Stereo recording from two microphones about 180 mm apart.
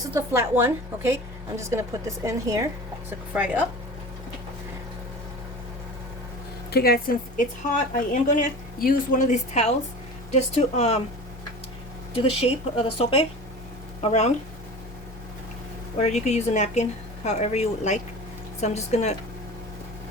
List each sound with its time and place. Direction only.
0.1 s a woman's voice: 15° right (ahead or behind)
6.7 s a woman's voice: 60° left (ahead or behind); by 11.0 s 35° left (ahead or behind)
12.1 s speech: 30° left (ahead or behind)
16.0 s speech: 40° left (ahead or behind)